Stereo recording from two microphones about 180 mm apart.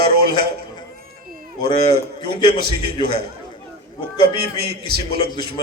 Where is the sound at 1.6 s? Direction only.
25° left (ahead or behind).